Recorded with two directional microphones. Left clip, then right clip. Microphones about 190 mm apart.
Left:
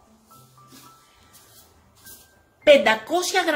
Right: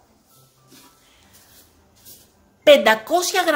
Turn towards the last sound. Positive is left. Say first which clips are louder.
# right 3 dB
turn(degrees=-20)  # may be behind; listen again after turning